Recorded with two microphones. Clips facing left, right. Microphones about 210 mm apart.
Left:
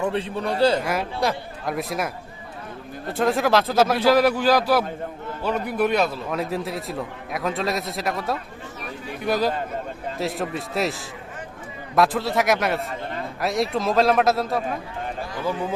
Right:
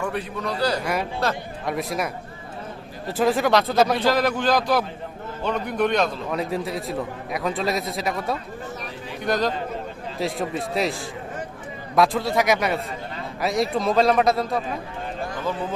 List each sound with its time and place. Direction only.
0.0 s a man's voice: 25° left (ahead or behind)
1.2 s speech: 15° left (ahead or behind)
1.6 s a man's voice: centre (ahead or behind)